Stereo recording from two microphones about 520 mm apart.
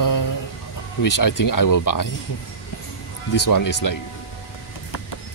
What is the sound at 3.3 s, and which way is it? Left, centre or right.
Speech, left.